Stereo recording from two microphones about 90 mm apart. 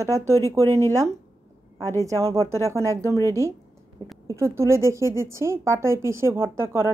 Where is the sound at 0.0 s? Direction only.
35° right (ahead or behind).